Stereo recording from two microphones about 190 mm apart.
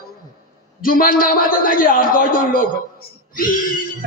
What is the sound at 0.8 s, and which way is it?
A man's voice, 50° left (ahead or behind).